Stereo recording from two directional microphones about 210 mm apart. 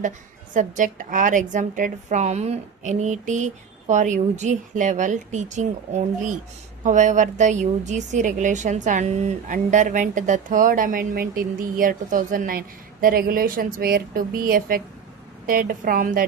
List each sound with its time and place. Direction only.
0.5 s a woman's voice: 35° right (ahead or behind)